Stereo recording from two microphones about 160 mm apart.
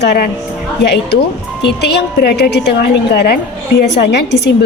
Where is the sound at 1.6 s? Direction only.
90° left.